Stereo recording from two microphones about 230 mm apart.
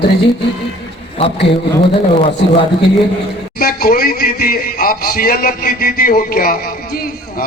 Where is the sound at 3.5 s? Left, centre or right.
Left.